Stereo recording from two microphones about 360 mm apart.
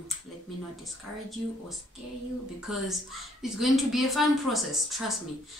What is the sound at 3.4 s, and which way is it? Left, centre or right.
Speech, centre.